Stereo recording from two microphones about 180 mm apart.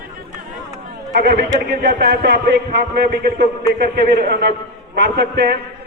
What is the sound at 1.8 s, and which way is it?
A man's voice, 65° right (ahead or behind).